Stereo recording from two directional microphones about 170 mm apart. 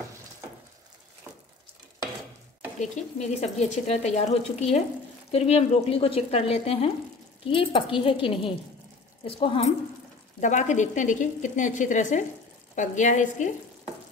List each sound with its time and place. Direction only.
2.8 s speech: 45° left (ahead or behind)
10.4 s a woman's voice: 45° left (ahead or behind)